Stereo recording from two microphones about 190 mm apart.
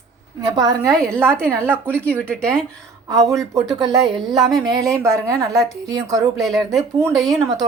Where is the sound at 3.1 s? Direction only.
15° right (ahead or behind).